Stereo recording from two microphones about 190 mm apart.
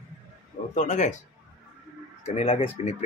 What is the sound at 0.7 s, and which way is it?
Speech, 40° left (ahead or behind).